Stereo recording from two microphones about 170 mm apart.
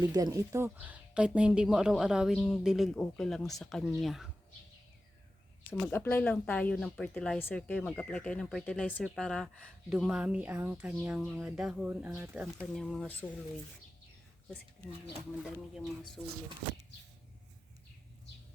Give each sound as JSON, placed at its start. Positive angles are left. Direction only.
{"t": 0.0, "sound": "speech", "side_deg": -20}
{"t": 0.8, "sound": "speech", "side_deg": -5}
{"t": 5.8, "sound": "speech", "side_deg": 10}
{"t": 12.7, "sound": "speech", "side_deg": 5}
{"t": 16.2, "sound": "speech", "side_deg": 5}